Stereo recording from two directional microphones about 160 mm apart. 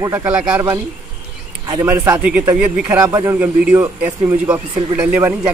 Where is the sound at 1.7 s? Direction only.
15° right (ahead or behind).